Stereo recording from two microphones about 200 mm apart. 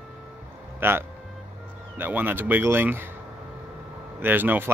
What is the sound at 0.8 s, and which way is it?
Speech, 10° right (ahead or behind).